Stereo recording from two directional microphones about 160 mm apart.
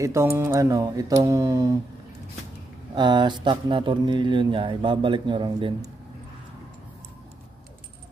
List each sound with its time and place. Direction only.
0.0 s speech: 20° right (ahead or behind)
2.9 s speech: 30° right (ahead or behind)